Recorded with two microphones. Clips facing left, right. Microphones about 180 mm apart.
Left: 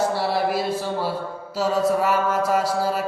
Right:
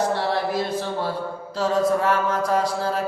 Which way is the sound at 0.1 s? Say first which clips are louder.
Left 1 dB; 10° left (ahead or behind).